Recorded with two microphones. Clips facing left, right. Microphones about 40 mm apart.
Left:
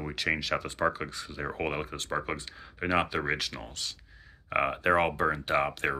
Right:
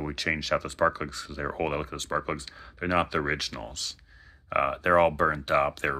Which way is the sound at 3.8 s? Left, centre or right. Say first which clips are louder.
Even; left.